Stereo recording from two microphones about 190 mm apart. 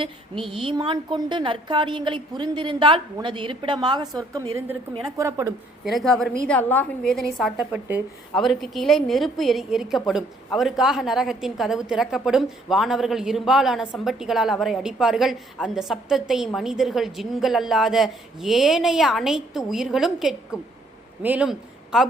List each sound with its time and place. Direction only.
0.6 s a woman's voice: 25° right (ahead or behind)
5.8 s a woman's voice: centre (ahead or behind)
7.6 s a woman's voice: 10° right (ahead or behind)
8.3 s a woman's voice: centre (ahead or behind)